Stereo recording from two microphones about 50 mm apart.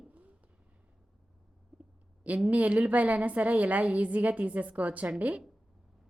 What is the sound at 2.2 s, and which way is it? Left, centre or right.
A woman's voice, right.